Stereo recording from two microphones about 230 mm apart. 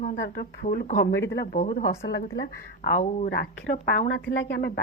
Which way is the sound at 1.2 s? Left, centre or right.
Left.